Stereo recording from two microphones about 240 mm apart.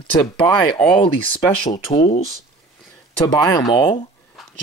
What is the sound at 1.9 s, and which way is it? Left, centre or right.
Speech, left.